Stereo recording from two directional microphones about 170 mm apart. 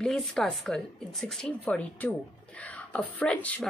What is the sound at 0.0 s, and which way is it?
Speech, centre (ahead or behind).